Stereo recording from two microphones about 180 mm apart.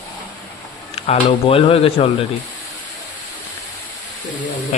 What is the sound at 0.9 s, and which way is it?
Speech, 30° left (ahead or behind).